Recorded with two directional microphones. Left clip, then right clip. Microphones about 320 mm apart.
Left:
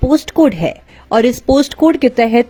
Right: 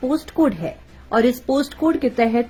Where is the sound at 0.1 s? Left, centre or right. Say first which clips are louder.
Left 9 dB; left.